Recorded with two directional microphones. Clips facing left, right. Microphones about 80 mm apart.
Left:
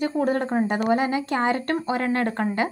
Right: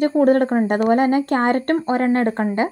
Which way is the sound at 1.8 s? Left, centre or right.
Right.